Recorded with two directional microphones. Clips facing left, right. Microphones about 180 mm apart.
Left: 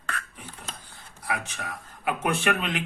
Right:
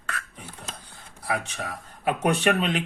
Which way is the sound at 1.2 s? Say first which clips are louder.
Right 3 dB; 30° right (ahead or behind).